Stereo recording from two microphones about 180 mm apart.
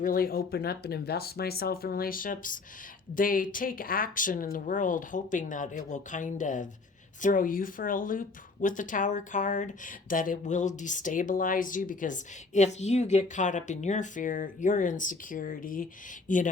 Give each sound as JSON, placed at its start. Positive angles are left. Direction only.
{"t": 0.0, "sound": "speech", "side_deg": 55}